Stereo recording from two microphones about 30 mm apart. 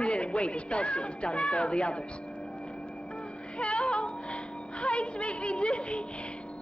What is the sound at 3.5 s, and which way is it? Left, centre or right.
Music, left.